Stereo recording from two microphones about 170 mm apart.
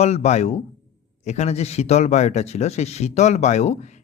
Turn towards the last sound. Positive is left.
turn(degrees=40)  # may be behind; listen again after turning